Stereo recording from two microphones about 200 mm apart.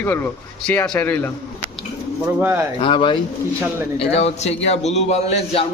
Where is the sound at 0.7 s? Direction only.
10° left (ahead or behind).